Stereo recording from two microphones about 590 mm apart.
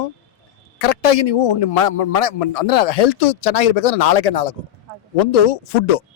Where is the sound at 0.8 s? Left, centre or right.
Left.